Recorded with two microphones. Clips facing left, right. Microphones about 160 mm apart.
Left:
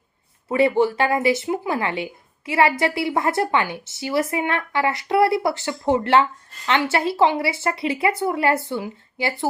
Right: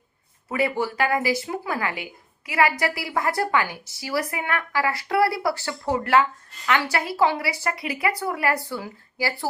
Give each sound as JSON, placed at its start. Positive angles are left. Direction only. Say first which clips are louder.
{"t": 0.4, "sound": "a woman's voice", "louder": "left 7 dB", "side_deg": 25}